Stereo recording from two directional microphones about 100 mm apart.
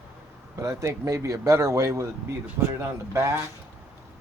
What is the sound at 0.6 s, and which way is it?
Speech, 35° right (ahead or behind).